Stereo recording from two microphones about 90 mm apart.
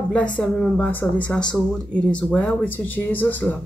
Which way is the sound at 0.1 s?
15° left (ahead or behind).